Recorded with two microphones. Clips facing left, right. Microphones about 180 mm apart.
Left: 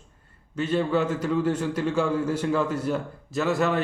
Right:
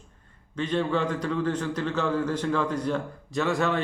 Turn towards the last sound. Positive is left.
turn(degrees=5)  # may be behind; listen again after turning